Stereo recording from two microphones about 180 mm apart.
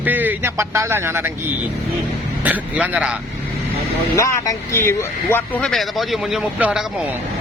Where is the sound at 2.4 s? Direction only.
10° right (ahead or behind).